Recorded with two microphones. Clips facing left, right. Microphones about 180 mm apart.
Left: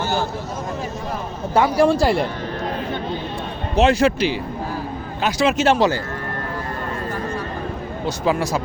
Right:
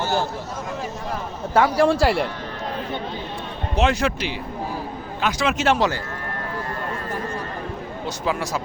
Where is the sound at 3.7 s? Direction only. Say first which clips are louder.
Left 5 dB; 35° left (ahead or behind).